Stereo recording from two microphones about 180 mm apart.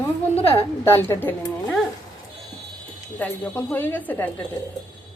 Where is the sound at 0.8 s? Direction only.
10° left (ahead or behind).